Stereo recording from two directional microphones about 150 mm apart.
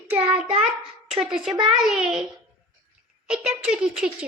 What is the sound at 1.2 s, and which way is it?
A woman's voice, 5° right (ahead or behind).